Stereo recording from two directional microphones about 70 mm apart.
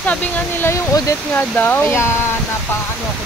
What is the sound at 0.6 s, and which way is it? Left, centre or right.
Speech, left.